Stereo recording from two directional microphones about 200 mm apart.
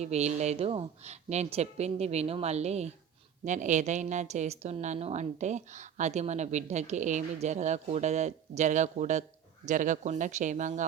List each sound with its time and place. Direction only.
0.0 s a woman's voice: 35° right (ahead or behind)